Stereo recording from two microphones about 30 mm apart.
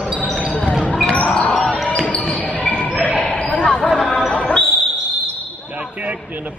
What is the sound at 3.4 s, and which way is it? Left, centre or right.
Basketball bounce, left.